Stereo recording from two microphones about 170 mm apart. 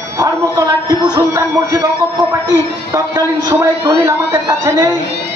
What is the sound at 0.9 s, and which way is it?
Speech, 20° right (ahead or behind).